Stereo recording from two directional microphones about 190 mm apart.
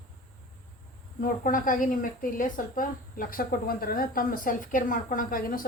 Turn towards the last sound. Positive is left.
turn(degrees=45)  # may be behind; listen again after turning